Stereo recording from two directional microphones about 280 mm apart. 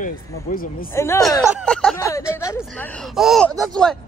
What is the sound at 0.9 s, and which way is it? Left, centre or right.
Speech, centre.